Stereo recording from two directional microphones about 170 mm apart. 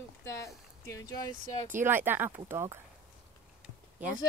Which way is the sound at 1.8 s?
10° right (ahead or behind).